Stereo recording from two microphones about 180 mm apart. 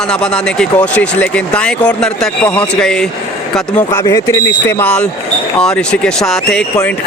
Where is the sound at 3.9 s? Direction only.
20° left (ahead or behind).